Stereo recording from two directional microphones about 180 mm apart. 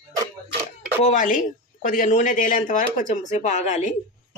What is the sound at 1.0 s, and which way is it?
Speech, 45° left (ahead or behind).